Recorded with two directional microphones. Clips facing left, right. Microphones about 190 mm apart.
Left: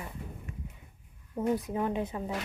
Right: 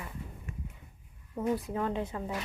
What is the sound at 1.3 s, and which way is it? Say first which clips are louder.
Speech: left 2 dB; 15° left (ahead or behind).